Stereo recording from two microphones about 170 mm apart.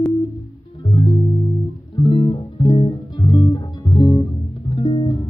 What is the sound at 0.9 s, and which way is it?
Music, 30° left (ahead or behind).